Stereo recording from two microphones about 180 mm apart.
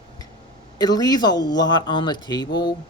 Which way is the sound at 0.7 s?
20° left (ahead or behind).